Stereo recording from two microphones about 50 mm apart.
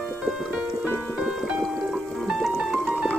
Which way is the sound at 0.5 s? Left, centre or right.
Right.